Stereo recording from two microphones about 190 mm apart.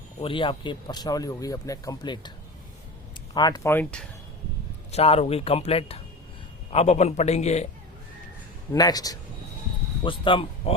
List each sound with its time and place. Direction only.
0.2 s speech: 25° left (ahead or behind)
3.3 s speech: 20° left (ahead or behind)
4.9 s speech: 30° left (ahead or behind)
8.7 s speech: 20° left (ahead or behind)